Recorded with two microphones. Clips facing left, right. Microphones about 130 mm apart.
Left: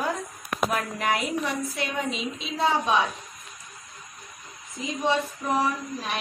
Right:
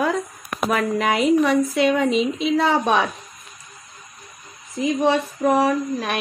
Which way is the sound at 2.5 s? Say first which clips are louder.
Right 3 dB; 70° right (ahead or behind).